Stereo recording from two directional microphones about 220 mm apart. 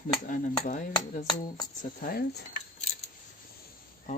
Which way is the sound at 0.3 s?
40° left (ahead or behind).